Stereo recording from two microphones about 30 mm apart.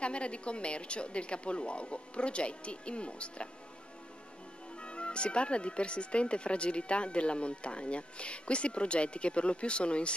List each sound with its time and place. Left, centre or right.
0.0 s speech: left
4.8 s speech: left